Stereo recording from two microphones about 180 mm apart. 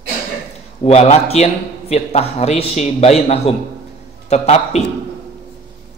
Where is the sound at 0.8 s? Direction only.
35° left (ahead or behind).